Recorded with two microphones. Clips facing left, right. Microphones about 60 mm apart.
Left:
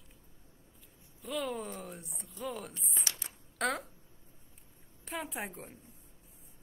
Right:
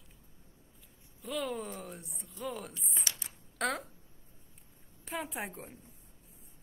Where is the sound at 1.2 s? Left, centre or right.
Centre.